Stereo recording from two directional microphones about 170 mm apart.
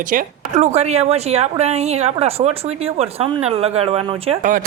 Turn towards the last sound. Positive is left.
turn(degrees=-35)  # may be behind; listen again after turning